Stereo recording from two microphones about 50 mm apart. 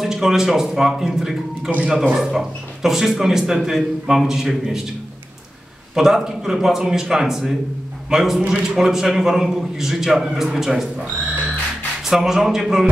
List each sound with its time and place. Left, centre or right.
0.0 s a man's voice: centre
1.7 s speech: right
2.1 s a man's voice: centre
5.9 s a man's voice: centre
12.0 s a man's voice: centre